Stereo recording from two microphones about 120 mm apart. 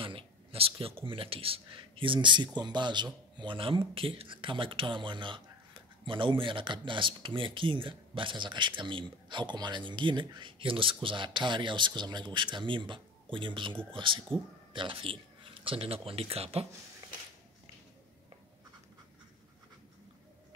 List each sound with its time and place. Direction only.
0.0 s speech: 50° right (ahead or behind)